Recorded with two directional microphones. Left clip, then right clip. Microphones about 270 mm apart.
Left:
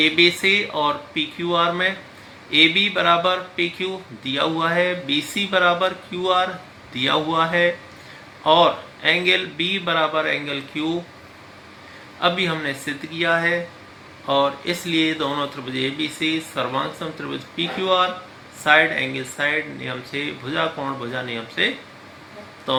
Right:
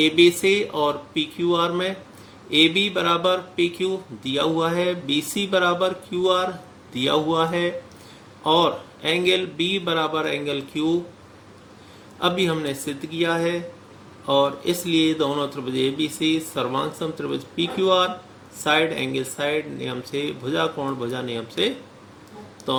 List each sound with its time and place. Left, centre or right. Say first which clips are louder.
0.0 s speech: even; centre
12.2 s speech: left 1 dB; centre